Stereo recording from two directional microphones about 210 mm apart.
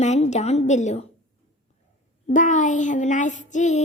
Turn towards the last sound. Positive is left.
turn(degrees=35)  # may be behind; listen again after turning